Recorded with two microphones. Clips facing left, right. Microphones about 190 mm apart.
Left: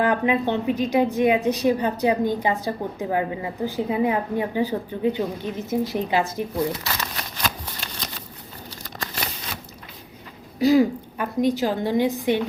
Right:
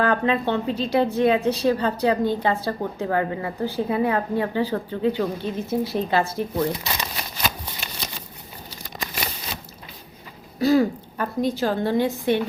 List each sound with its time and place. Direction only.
0.0 s a woman's voice: 15° left (ahead or behind)
6.7 s crumpling: 20° right (ahead or behind)
7.3 s shuffling cards: 10° right (ahead or behind)
8.7 s a sound: 10° right (ahead or behind)
10.6 s a woman's voice: 15° left (ahead or behind)